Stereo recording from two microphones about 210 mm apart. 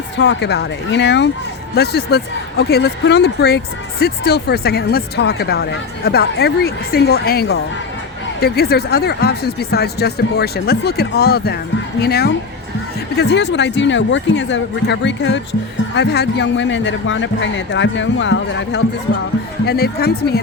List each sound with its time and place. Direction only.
0.2 s a man's voice: 55° left (ahead or behind)
19.6 s speech: 50° left (ahead or behind)